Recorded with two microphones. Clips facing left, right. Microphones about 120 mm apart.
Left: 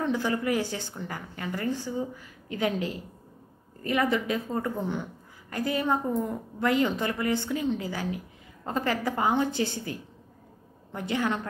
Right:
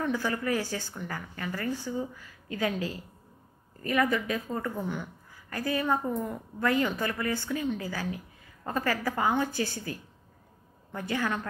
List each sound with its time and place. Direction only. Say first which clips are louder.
0.0 s a woman's voice: left 2 dB; 20° left (ahead or behind)